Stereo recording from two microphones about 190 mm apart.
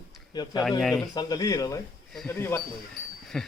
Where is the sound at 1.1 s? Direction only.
20° left (ahead or behind).